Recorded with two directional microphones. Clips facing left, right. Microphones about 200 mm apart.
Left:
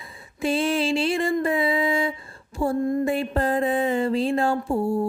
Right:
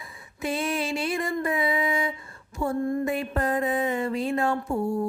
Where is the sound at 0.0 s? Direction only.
30° left (ahead or behind).